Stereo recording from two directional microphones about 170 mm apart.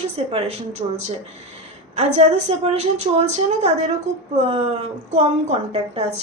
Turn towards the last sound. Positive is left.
turn(degrees=-40)  # may be behind; listen again after turning